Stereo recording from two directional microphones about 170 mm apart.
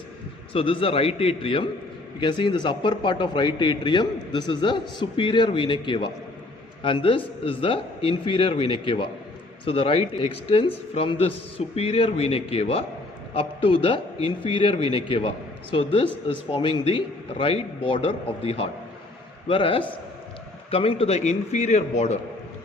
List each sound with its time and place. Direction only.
0.5 s a man's voice: 30° left (ahead or behind)